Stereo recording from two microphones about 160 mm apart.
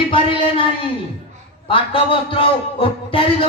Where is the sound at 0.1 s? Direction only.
35° left (ahead or behind).